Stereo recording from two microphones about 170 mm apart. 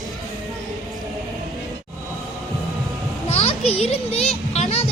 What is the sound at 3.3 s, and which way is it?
A child's voice, 35° left (ahead or behind).